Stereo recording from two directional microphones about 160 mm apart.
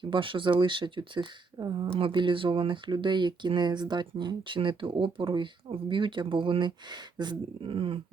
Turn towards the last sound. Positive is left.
turn(degrees=-35)  # may be behind; listen again after turning